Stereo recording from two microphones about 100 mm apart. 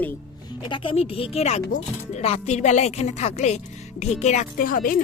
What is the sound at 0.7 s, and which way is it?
Speech, 60° left (ahead or behind).